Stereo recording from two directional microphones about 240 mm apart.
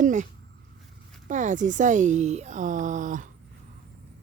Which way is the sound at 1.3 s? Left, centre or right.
Right.